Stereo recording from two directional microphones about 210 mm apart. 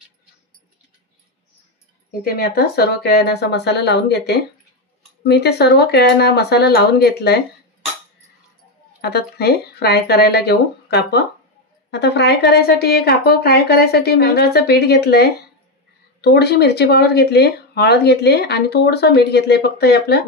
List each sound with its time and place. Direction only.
2.0 s speech: 45° left (ahead or behind)
9.0 s speech: 50° left (ahead or behind)